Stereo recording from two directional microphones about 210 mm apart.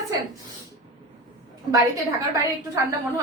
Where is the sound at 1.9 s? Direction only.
15° right (ahead or behind).